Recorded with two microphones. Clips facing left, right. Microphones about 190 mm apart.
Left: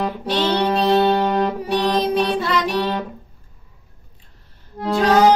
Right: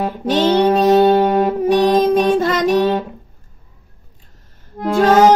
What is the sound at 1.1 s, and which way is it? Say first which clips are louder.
Music: right 5 dB; 10° right (ahead or behind).